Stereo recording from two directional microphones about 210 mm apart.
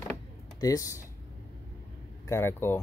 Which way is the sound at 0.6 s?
15° left (ahead or behind).